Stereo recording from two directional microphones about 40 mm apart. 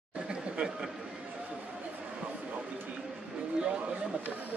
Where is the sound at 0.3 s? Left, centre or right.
Right.